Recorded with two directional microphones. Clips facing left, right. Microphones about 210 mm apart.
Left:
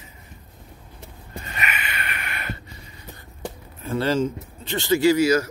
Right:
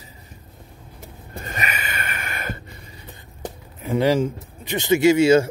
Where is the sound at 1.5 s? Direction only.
40° right (ahead or behind).